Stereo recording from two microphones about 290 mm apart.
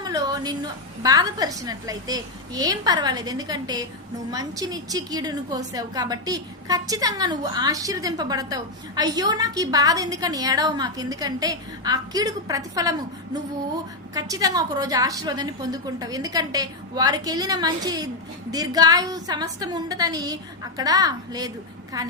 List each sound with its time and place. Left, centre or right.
0.0 s a sound: centre
1.0 s a woman's voice: centre
14.1 s a woman's voice: centre